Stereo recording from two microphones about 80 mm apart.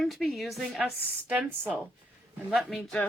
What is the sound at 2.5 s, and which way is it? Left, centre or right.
Speech, centre.